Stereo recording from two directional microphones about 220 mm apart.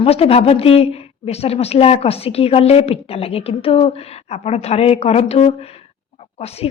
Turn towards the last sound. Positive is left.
turn(degrees=30)  # may be behind; listen again after turning